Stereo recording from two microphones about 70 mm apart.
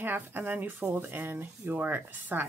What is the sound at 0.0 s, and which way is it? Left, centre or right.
Speech, right.